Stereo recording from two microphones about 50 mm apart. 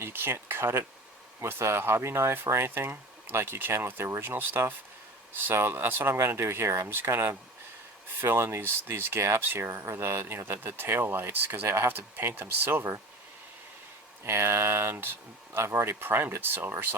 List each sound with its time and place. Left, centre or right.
0.0 s a sound: right
1.4 s speech: right
6.1 s speech: right
6.8 s speech: right
14.3 s speech: right
15.5 s speech: right
15.9 s speech: right